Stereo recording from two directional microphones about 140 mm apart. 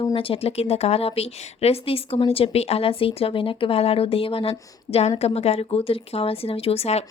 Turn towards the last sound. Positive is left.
turn(degrees=45)  # may be behind; listen again after turning